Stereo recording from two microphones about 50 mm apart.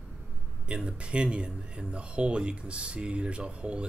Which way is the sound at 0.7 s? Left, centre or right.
Centre.